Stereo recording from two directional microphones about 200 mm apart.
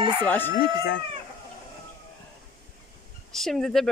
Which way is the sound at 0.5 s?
50° left (ahead or behind).